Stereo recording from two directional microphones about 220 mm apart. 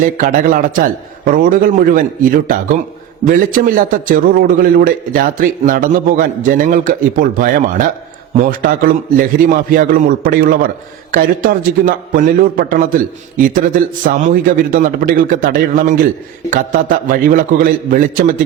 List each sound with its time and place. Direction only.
0.0 s a man's voice: 40° right (ahead or behind)